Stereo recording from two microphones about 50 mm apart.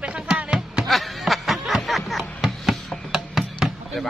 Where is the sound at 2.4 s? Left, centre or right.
Centre.